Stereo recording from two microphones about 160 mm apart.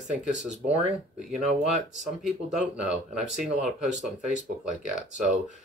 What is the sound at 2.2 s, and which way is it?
Speech, 5° right (ahead or behind).